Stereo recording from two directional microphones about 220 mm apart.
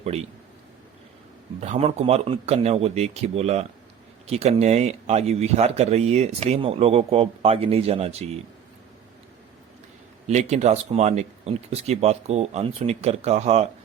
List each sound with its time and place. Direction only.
1.6 s speech: 30° right (ahead or behind)
10.2 s speech: 30° right (ahead or behind)